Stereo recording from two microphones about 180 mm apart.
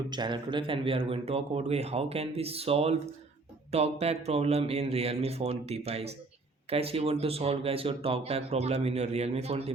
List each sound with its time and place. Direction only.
0.1 s speech: 25° right (ahead or behind)